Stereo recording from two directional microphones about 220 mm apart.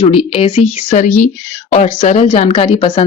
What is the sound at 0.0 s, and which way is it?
Speech, 25° left (ahead or behind).